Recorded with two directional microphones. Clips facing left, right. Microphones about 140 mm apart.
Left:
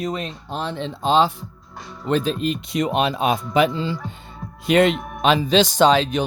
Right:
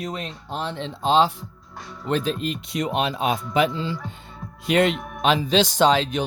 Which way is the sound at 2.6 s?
85° left.